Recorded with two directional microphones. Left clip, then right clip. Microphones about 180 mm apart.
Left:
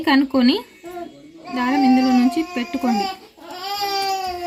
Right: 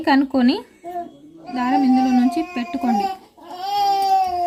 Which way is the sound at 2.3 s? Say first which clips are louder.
Even; 10° right (ahead or behind).